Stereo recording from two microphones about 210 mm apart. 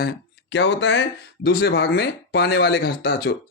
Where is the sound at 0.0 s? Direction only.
50° left (ahead or behind).